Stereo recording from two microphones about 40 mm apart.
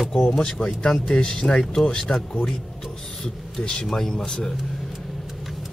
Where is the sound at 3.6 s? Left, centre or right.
Left.